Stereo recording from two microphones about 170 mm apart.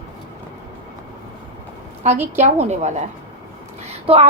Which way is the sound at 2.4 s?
40° right (ahead or behind).